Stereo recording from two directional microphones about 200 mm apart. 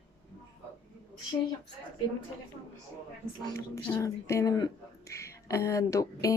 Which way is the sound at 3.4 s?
20° left (ahead or behind).